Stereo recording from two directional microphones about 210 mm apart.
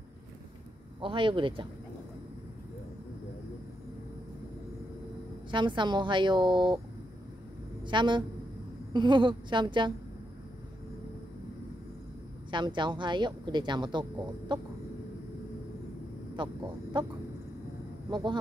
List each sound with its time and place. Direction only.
1.0 s speech: 25° right (ahead or behind)
5.5 s speech: 20° right (ahead or behind)
7.8 s a woman's voice: 20° right (ahead or behind)
12.4 s speech: 20° right (ahead or behind)
16.4 s speech: 25° right (ahead or behind)
18.1 s speech: 20° right (ahead or behind)